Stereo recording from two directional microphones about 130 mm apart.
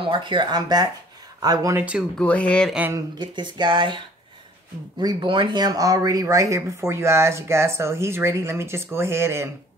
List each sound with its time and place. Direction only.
0.0 s speech: 40° right (ahead or behind)
1.8 s speech: 10° right (ahead or behind)
2.1 s speech: 10° left (ahead or behind)
3.2 s speech: 35° right (ahead or behind); by 9.5 s 20° right (ahead or behind)